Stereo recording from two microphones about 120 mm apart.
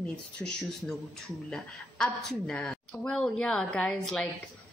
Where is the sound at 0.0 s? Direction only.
10° left (ahead or behind).